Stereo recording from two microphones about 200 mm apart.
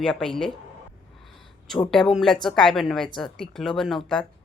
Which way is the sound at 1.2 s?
Centre (ahead or behind).